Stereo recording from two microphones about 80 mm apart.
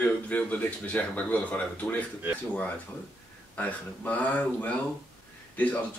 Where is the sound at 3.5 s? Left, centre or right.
Centre.